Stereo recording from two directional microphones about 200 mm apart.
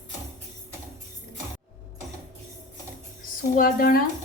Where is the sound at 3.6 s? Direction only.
45° left (ahead or behind).